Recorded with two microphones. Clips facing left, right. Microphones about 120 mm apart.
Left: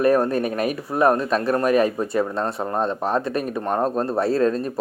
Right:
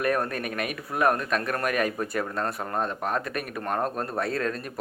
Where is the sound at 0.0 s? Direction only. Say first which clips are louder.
Left 8 dB; 30° left (ahead or behind).